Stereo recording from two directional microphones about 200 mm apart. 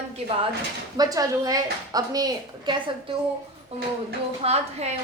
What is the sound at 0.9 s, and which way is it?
A woman's voice, 20° right (ahead or behind).